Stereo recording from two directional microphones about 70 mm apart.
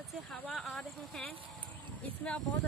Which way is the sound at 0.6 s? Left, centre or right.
Centre.